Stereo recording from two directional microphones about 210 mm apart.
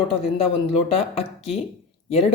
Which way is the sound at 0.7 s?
30° left (ahead or behind).